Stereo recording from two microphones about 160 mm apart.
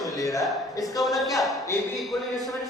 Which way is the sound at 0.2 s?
20° left (ahead or behind).